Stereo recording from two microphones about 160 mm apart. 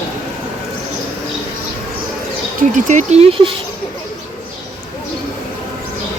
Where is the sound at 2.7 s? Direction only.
50° right (ahead or behind).